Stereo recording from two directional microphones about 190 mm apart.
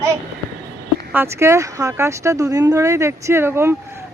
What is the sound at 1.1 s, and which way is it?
Speech, 15° right (ahead or behind).